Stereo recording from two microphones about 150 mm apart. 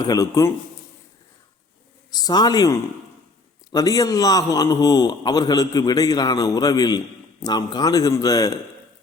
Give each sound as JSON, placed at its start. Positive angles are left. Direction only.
{"t": 0.0, "sound": "a man's voice", "side_deg": 25}
{"t": 2.0, "sound": "a man's voice", "side_deg": 25}